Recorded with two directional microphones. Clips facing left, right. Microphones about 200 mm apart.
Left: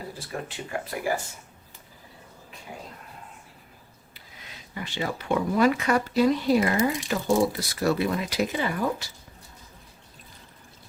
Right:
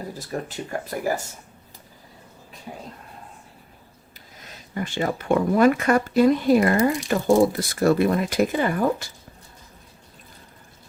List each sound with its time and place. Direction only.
0.1 s speech: 40° right (ahead or behind)
2.7 s speech: 35° right (ahead or behind)
4.7 s speech: 50° right (ahead or behind)